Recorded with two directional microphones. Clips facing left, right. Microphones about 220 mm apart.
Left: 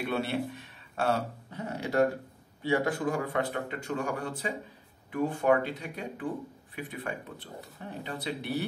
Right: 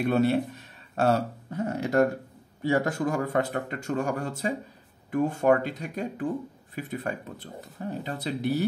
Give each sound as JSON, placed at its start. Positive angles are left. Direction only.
{"t": 0.0, "sound": "speech", "side_deg": -40}